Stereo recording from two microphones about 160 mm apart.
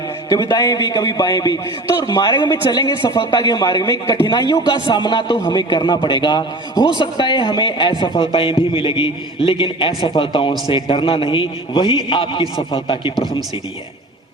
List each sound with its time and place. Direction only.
0.3 s a man's voice: 25° left (ahead or behind)